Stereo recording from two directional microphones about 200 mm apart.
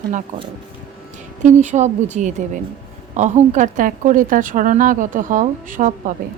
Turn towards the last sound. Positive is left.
turn(degrees=-40)  # may be behind; listen again after turning